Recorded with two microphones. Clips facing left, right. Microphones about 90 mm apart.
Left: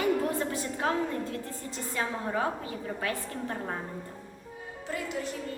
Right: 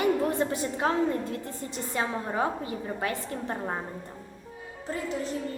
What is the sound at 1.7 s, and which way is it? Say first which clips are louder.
A woman's voice: right 2 dB; 25° right (ahead or behind).